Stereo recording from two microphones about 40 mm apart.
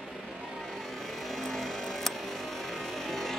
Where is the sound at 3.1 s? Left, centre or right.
Centre.